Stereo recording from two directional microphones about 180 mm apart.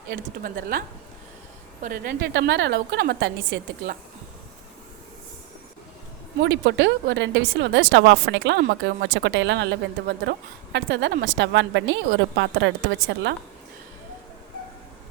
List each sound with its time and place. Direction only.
0.1 s a woman's voice: 55° right (ahead or behind)
2.2 s a woman's voice: 75° right (ahead or behind)
6.4 s speech: 90° right